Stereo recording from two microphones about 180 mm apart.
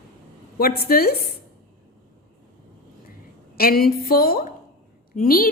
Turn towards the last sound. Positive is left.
turn(degrees=50)  # may be behind; listen again after turning